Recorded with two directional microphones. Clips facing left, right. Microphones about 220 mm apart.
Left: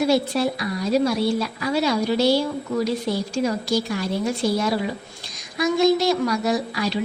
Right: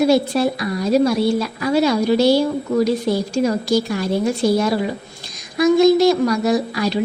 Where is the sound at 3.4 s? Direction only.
45° right (ahead or behind).